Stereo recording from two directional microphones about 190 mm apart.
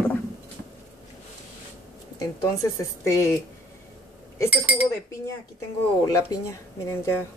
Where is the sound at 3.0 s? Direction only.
15° left (ahead or behind).